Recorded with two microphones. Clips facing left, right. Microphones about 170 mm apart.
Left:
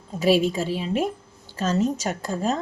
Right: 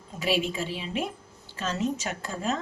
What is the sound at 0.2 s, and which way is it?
A woman's voice, 40° left (ahead or behind).